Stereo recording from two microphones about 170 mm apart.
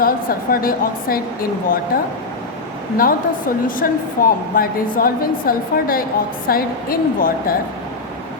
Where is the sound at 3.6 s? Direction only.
55° left (ahead or behind).